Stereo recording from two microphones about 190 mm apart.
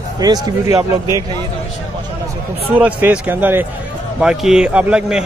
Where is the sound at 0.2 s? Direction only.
20° right (ahead or behind).